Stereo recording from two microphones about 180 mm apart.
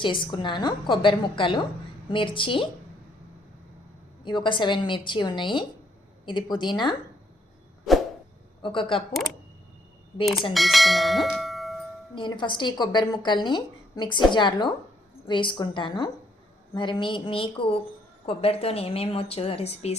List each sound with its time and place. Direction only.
0.0 s a woman's voice: 25° left (ahead or behind)
4.2 s a woman's voice: 25° left (ahead or behind)
7.9 s a sound: centre (ahead or behind)
8.6 s a woman's voice: 30° left (ahead or behind)
10.5 s speech: centre (ahead or behind)
12.1 s a woman's voice: 25° left (ahead or behind)